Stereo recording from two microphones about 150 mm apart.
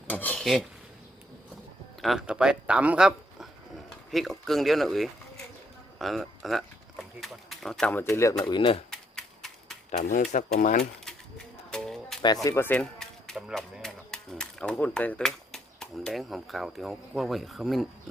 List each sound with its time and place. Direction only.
0.1 s dishes: 10° left (ahead or behind)
2.0 s speech: centre (ahead or behind)
8.0 s speech: 20° left (ahead or behind)
8.4 s speech: 35° left (ahead or behind)
8.9 s typewriter: 5° left (ahead or behind)
9.9 s speech: 55° left (ahead or behind)
11.7 s music: 5° left (ahead or behind)
12.2 s speech: 25° left (ahead or behind)
12.8 s speech: 5° left (ahead or behind)